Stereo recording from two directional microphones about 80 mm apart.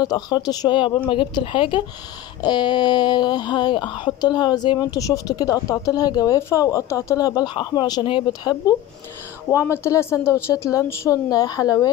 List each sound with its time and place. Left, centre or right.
0.0 s speech: left
0.7 s a woman's voice: left
2.4 s speech: left
7.4 s speech: left
8.3 s speech: left
9.5 s speech: left
10.5 s speech: left